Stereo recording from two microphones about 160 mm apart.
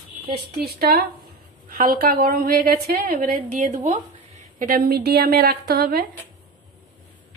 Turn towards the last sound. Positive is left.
turn(degrees=-75)  # may be behind; listen again after turning